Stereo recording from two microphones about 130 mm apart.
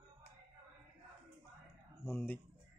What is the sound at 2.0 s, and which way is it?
Speech, centre (ahead or behind).